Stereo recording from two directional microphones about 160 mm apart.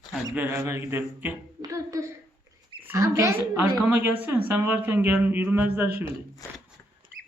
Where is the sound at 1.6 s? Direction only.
20° right (ahead or behind).